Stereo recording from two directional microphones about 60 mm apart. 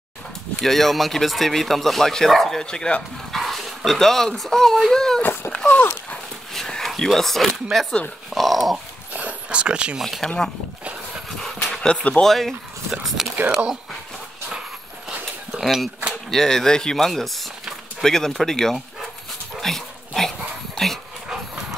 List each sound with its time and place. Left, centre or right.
0.6 s speech: centre
3.3 s speech: centre
5.2 s speech: left
5.5 s a sound: left
6.5 s a sound: centre
7.2 s speech: centre
8.3 s dog: centre
9.1 s a sound: right
10.0 s speech: centre
11.4 s a sound: centre
12.3 s speech: centre
15.5 s speech: centre
19.6 s dog: centre